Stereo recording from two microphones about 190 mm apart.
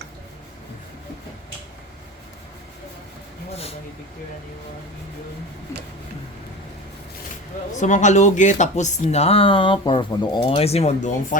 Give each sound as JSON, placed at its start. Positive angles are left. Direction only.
{"t": 3.5, "sound": "speech", "side_deg": 30}
{"t": 7.8, "sound": "speech", "side_deg": 40}